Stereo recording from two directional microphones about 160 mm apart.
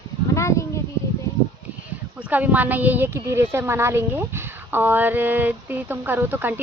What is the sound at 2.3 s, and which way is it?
A woman's voice, 10° right (ahead or behind).